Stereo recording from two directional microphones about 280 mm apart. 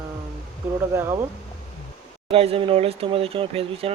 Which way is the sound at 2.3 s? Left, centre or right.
Centre.